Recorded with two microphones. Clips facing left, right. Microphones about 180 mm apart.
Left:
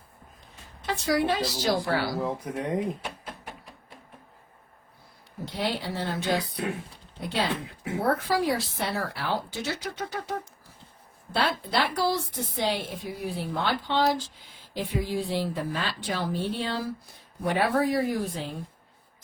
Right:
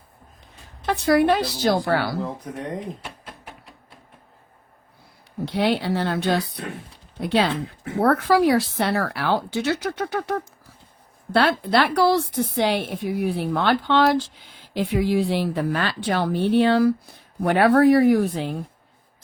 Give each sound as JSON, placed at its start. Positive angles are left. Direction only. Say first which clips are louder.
{"t": 0.9, "sound": "speech", "louder": "right 7 dB", "side_deg": -60}
{"t": 2.2, "sound": "speech", "louder": "left 1 dB", "side_deg": 5}
{"t": 5.5, "sound": "a woman's voice", "louder": "right 8 dB", "side_deg": -70}